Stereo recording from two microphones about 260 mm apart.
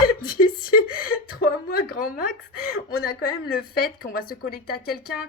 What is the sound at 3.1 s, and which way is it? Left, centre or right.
A woman's voice, left.